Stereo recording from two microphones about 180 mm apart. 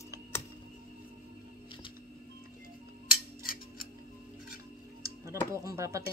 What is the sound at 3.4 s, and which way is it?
Scissors, 50° left (ahead or behind).